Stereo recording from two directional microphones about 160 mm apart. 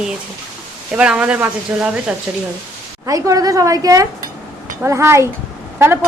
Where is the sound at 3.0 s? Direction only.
20° right (ahead or behind).